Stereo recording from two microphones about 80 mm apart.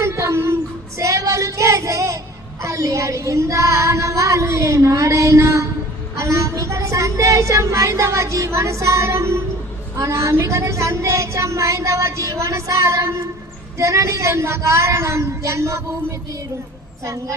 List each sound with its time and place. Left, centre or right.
0.0 s a sound: right
0.9 s child singing: right
2.6 s speech: right